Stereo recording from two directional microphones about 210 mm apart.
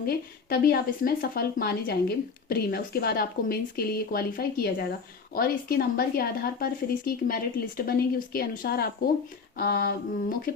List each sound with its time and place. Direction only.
0.0 s speech: 45° left (ahead or behind)